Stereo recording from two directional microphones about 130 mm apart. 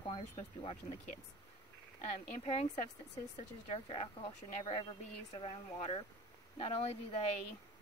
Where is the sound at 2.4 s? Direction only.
50° left (ahead or behind).